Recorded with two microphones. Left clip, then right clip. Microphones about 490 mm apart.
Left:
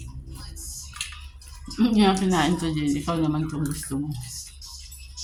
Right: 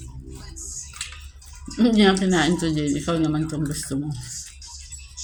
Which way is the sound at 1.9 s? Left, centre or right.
Left.